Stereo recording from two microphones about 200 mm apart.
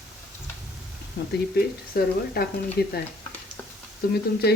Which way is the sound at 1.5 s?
50° left (ahead or behind).